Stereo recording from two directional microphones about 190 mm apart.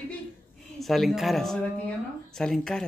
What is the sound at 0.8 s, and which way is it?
Speech, centre (ahead or behind).